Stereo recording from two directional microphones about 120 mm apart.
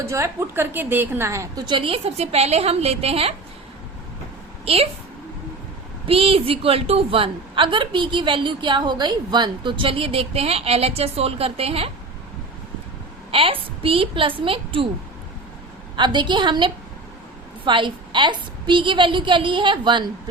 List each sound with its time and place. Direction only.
0.0 s a woman's voice: 25° right (ahead or behind)
1.6 s a woman's voice: 45° right (ahead or behind)
4.6 s a woman's voice: 55° right (ahead or behind)
6.1 s a woman's voice: 50° right (ahead or behind)
13.3 s a woman's voice: 50° right (ahead or behind)
16.0 s a woman's voice: 40° right (ahead or behind)